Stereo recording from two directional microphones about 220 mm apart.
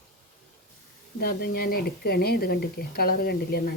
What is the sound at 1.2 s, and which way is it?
Speech, 45° left (ahead or behind).